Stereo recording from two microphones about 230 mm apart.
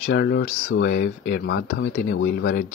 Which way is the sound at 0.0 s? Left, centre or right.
Left.